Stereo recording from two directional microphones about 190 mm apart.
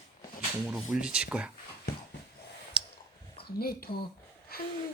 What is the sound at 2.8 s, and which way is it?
Clicking, 5° right (ahead or behind).